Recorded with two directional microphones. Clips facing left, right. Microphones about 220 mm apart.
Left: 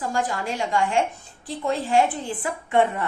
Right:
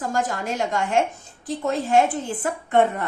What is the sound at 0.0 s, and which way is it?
A woman's voice, 45° right (ahead or behind).